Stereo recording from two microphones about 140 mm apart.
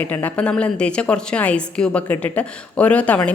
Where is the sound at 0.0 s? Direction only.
10° left (ahead or behind).